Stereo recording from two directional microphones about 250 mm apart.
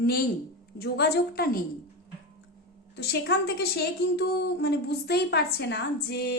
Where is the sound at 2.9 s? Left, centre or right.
Left.